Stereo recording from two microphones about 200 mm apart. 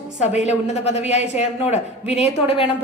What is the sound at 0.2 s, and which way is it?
A woman's voice, 35° left (ahead or behind).